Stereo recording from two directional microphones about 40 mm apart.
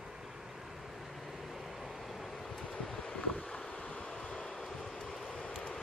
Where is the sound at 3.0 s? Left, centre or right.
Left.